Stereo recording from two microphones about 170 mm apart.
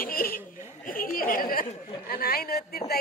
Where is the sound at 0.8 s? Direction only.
55° left (ahead or behind).